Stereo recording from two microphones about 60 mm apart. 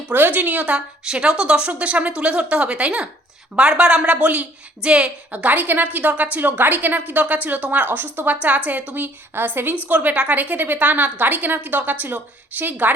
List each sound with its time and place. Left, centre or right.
0.1 s a woman's voice: right
1.0 s a woman's voice: centre
9.3 s a woman's voice: right